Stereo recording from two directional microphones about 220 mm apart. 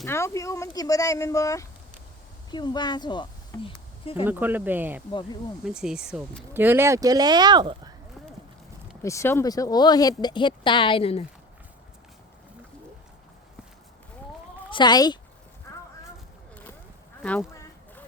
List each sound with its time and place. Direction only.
0.0 s speech: 15° left (ahead or behind)
4.3 s speech: 10° right (ahead or behind)
9.0 s speech: 10° left (ahead or behind)
14.7 s speech: 20° left (ahead or behind)
17.2 s speech: 5° left (ahead or behind)